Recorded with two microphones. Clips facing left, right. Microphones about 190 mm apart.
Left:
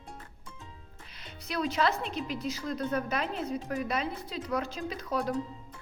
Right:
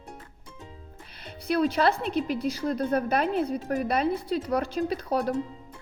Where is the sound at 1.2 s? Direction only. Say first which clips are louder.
Right 10 dB; 60° right (ahead or behind).